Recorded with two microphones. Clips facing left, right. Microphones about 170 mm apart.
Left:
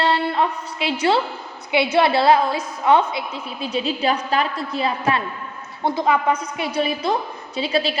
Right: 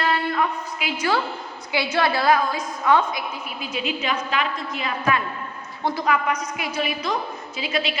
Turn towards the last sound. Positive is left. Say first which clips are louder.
# left 5 dB
turn(degrees=35)  # may be behind; listen again after turning